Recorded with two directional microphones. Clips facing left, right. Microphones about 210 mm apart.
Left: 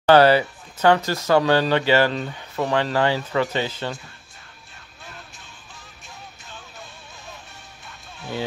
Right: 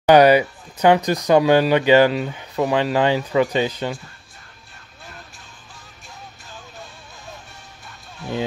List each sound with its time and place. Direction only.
0.0 s speech: 15° right (ahead or behind)